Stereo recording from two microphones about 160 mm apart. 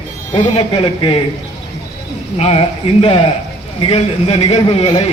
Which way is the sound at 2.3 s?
40° left (ahead or behind).